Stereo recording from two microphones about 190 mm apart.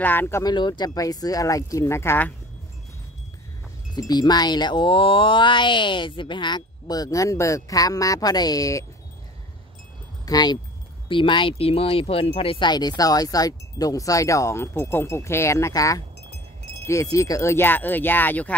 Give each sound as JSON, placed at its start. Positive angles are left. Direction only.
{"t": 0.0, "sound": "speech", "side_deg": 10}
{"t": 4.1, "sound": "speech", "side_deg": 20}
{"t": 10.2, "sound": "speech", "side_deg": 20}